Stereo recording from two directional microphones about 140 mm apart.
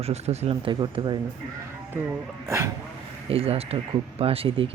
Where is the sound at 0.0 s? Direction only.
50° right (ahead or behind).